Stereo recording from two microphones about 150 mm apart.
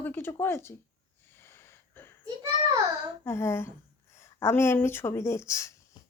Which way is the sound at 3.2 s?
15° left (ahead or behind).